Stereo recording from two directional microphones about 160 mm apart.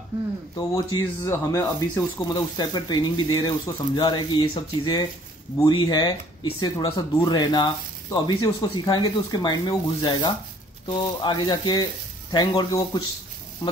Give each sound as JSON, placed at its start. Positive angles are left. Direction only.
{"t": 0.6, "sound": "speech", "side_deg": 20}